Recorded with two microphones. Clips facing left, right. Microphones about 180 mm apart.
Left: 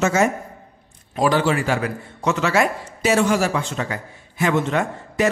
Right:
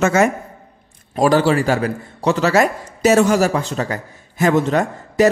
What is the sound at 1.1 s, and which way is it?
A man's voice, 45° right (ahead or behind).